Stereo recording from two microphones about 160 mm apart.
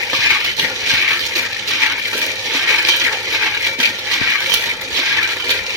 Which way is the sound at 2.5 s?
Centre (ahead or behind).